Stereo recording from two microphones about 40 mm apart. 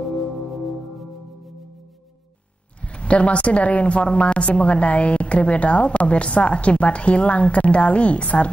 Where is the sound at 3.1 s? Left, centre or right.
Left.